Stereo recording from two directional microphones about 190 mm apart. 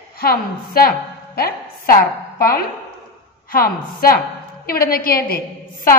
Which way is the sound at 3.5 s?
50° left (ahead or behind).